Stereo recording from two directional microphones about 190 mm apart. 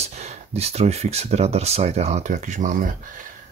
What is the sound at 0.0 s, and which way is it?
Speech, 35° right (ahead or behind).